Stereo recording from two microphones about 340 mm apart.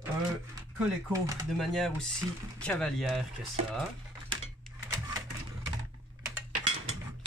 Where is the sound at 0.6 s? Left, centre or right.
Centre.